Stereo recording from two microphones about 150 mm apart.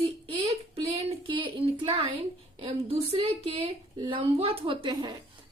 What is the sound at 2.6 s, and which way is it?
Speech, 40° right (ahead or behind).